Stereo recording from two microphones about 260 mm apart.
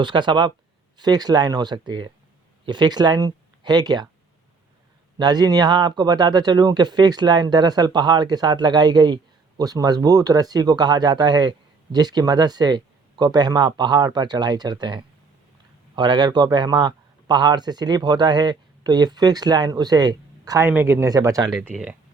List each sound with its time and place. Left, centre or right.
0.0 s a man's voice: centre
5.1 s a man's voice: centre
21.5 s speech: centre